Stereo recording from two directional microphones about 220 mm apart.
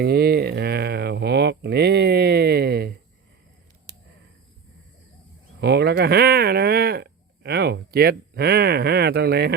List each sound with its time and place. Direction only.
0.0 s speech: 45° right (ahead or behind)
5.5 s speech: 50° right (ahead or behind)